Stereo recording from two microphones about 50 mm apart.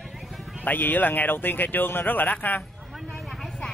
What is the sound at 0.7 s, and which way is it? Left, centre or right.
Speech, left.